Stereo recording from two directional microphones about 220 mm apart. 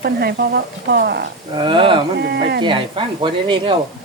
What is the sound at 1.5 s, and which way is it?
Speech, 20° right (ahead or behind).